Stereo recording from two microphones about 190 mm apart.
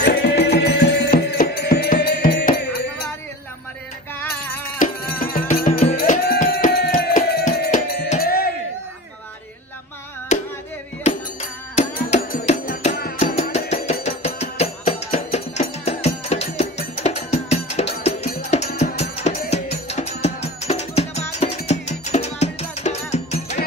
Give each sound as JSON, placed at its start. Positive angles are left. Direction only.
{"t": 0.0, "sound": "music", "side_deg": 60}
{"t": 4.6, "sound": "music", "side_deg": 50}
{"t": 10.3, "sound": "music", "side_deg": 40}
{"t": 11.7, "sound": "music", "side_deg": 35}